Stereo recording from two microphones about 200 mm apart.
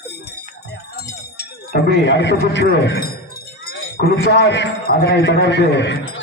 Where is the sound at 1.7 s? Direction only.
60° left (ahead or behind).